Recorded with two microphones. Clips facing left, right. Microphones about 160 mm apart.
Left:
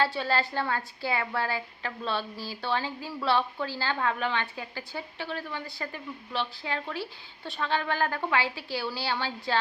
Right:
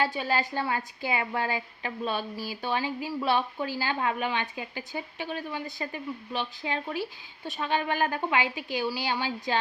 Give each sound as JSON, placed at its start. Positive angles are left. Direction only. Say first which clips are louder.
{"t": 0.0, "sound": "a woman's voice", "louder": "even", "side_deg": -15}